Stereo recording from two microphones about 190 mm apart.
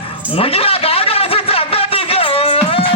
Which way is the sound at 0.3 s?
30° left (ahead or behind).